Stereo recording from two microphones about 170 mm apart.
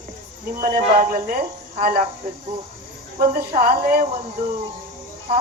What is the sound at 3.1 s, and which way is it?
Speech, 55° right (ahead or behind).